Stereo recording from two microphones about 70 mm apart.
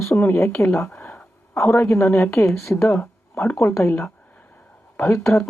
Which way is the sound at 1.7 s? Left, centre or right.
Left.